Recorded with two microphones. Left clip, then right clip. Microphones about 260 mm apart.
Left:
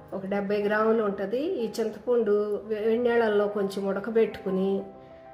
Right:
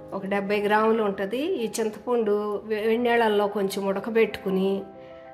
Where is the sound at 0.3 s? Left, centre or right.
Right.